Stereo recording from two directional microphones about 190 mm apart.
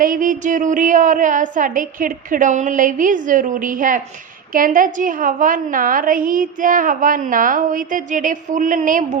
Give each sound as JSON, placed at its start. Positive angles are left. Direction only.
{"t": 0.0, "sound": "a woman's voice", "side_deg": -45}